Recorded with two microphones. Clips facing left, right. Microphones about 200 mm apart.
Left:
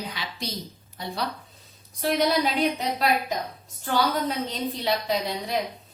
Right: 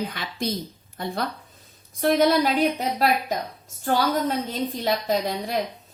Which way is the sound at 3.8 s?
45° right (ahead or behind).